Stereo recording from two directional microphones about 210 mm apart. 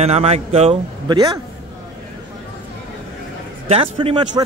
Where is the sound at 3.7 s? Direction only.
25° right (ahead or behind).